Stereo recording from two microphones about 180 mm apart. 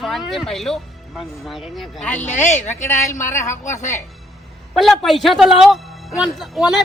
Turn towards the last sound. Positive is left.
turn(degrees=0)  # may be behind; listen again after turning